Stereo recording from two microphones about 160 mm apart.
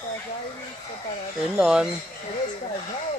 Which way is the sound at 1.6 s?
5° right (ahead or behind).